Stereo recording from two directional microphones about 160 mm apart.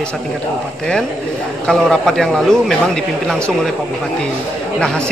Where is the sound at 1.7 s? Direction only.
5° left (ahead or behind).